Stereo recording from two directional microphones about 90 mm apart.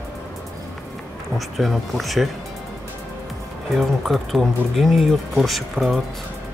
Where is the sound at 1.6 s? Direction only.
Centre (ahead or behind).